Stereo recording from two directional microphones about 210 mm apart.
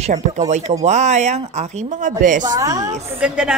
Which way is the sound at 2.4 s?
15° right (ahead or behind).